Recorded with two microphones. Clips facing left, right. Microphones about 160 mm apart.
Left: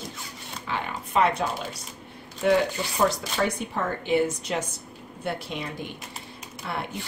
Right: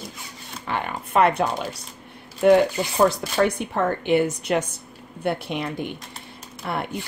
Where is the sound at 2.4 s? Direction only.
55° right (ahead or behind).